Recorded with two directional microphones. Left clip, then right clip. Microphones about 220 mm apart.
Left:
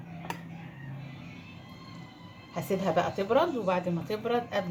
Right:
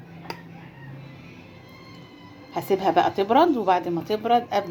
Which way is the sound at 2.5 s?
40° right (ahead or behind).